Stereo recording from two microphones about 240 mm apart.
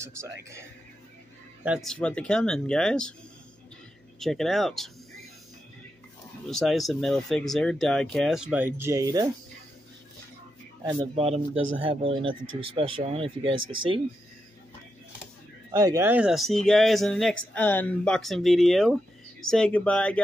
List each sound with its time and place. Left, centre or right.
0.0 s speech: centre
1.6 s speech: centre
4.2 s speech: centre
6.4 s speech: centre
11.1 s speech: right
15.7 s speech: centre